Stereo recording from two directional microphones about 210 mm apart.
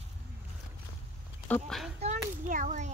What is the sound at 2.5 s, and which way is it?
Speech, 35° right (ahead or behind).